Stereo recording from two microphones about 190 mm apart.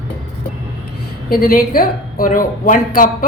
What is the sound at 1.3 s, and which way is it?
A woman's voice, 50° left (ahead or behind).